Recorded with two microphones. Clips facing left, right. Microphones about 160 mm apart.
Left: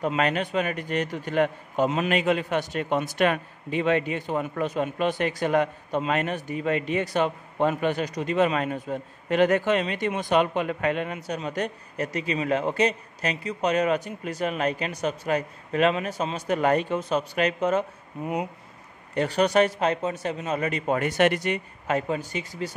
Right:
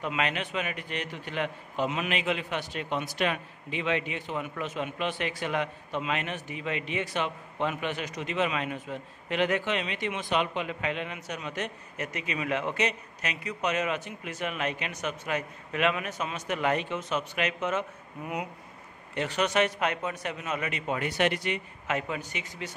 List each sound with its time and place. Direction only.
0.0 s a man's voice: 40° left (ahead or behind)
11.1 s a man's voice: 35° left (ahead or behind)
19.1 s a man's voice: 35° left (ahead or behind)